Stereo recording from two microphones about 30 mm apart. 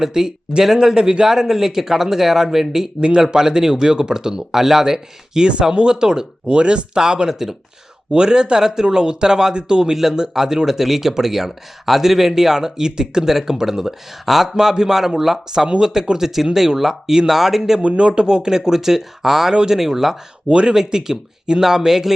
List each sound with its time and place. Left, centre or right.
0.0 s speech: centre
9.9 s speech: centre
14.5 s speech: centre
17.7 s speech: right; by 20.1 s centre
20.5 s speech: right
20.7 s speech: right